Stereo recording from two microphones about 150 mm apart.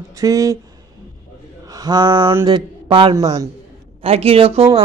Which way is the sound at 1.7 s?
25° right (ahead or behind).